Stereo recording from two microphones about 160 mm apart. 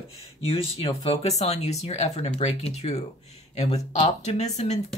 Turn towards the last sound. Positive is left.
turn(degrees=45)  # may be behind; listen again after turning